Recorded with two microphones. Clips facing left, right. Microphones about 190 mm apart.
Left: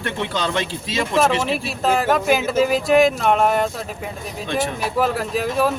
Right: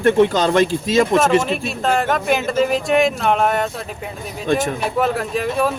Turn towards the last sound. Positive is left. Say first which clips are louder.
# even
turn(degrees=0)  # may be behind; listen again after turning